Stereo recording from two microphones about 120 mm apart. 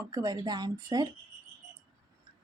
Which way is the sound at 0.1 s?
30° right (ahead or behind).